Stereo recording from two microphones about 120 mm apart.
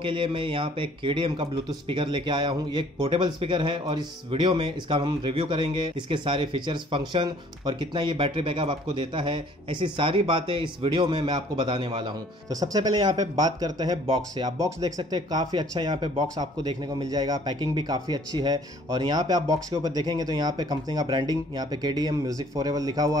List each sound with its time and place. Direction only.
0.0 s speech: 45° right (ahead or behind)